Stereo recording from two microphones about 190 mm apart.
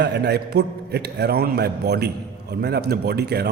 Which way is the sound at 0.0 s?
60° right (ahead or behind).